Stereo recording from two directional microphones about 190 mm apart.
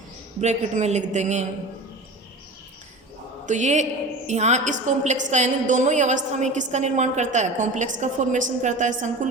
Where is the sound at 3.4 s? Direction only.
40° right (ahead or behind).